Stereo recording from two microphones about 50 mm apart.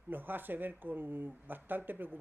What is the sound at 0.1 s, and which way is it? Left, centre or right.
Speech, right.